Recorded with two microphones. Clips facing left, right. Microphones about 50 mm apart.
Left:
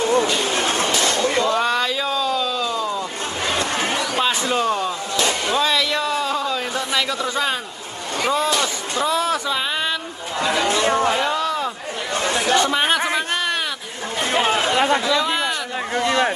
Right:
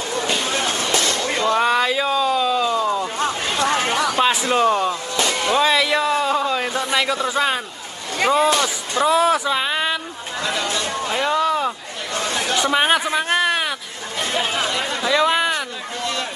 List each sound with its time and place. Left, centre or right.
0.4 s a sound: left
1.6 s a sound: centre
3.6 s chatter: right
4.2 s a man's voice: centre
10.4 s speech: left
11.2 s a sound: centre
12.1 s chatter: left
12.7 s speech: centre
13.3 s a sound: centre
14.3 s chatter: left
15.0 s speech: right
16.0 s speech: left